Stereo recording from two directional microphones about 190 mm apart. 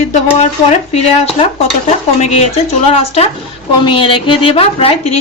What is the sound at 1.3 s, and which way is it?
Speech, 35° left (ahead or behind).